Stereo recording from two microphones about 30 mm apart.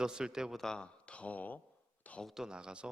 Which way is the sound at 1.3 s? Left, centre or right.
Left.